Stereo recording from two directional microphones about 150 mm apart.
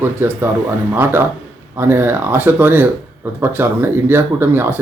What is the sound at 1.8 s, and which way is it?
Speech, 15° right (ahead or behind).